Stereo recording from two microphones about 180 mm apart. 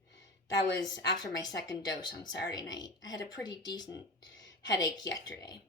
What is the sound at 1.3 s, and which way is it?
Speech, 20° left (ahead or behind).